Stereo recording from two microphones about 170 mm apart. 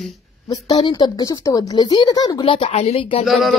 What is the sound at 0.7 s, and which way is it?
Speech, 25° left (ahead or behind).